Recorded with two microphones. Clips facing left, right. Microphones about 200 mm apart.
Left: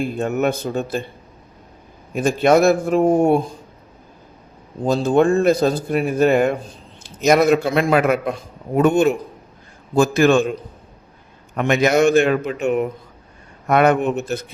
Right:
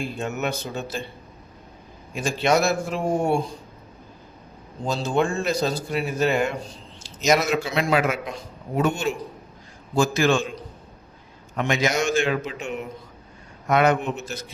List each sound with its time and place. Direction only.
0.0 s speech: 55° left (ahead or behind)
2.1 s speech: 50° left (ahead or behind)
4.8 s a man's voice: 55° left (ahead or behind)